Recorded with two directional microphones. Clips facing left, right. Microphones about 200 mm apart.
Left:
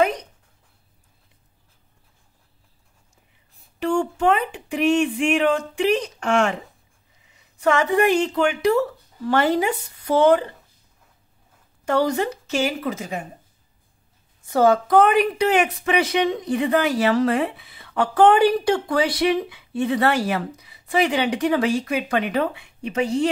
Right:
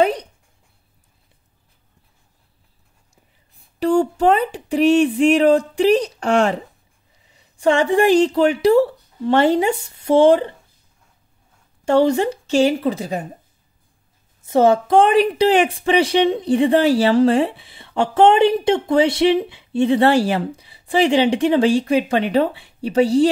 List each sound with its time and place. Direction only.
0.0 s a sound: 35° right (ahead or behind)
3.8 s speech: 35° right (ahead or behind)
11.8 s a woman's voice: 25° right (ahead or behind)
14.4 s a woman's voice: 25° right (ahead or behind)